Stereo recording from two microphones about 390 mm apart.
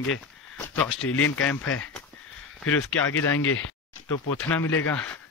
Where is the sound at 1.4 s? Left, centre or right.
Centre.